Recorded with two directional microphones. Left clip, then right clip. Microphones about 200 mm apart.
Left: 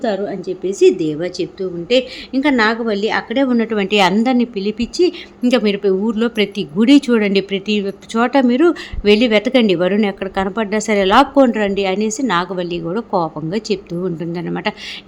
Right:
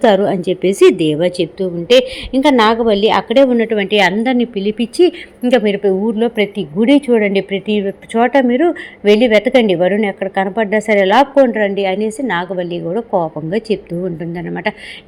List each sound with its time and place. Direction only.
0.0 s a woman's voice: 25° right (ahead or behind); by 3.4 s 5° right (ahead or behind)
3.4 s speech: 5° left (ahead or behind)